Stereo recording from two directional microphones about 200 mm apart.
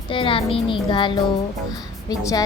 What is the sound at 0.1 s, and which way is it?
A child's voice, 25° left (ahead or behind).